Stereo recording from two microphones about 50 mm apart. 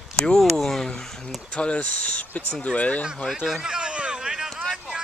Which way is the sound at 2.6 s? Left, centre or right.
Left.